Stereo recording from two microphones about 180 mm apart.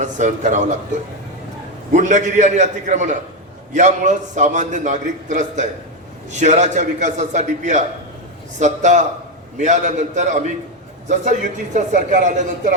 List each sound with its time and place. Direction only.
0.0 s a man's voice: 45° right (ahead or behind)
1.9 s a man's voice: 40° right (ahead or behind)